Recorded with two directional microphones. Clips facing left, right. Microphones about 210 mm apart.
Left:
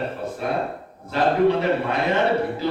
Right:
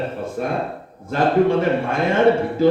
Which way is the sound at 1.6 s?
50° right (ahead or behind).